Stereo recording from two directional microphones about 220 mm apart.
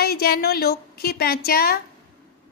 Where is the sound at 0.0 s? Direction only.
45° left (ahead or behind).